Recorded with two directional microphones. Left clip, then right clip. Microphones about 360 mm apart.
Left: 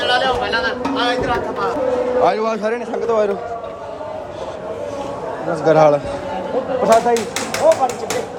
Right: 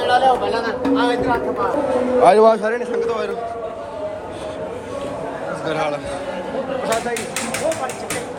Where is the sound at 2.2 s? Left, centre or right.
Centre.